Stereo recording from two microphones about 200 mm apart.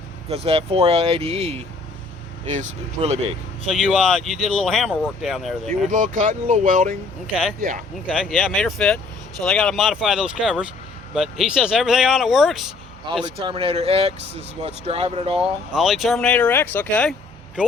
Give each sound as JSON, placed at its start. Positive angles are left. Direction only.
{"t": 0.3, "sound": "speech", "side_deg": -30}
{"t": 3.7, "sound": "speech", "side_deg": 0}
{"t": 5.9, "sound": "speech", "side_deg": -40}
{"t": 8.1, "sound": "speech", "side_deg": 0}
{"t": 13.1, "sound": "speech", "side_deg": -25}
{"t": 15.7, "sound": "speech", "side_deg": 0}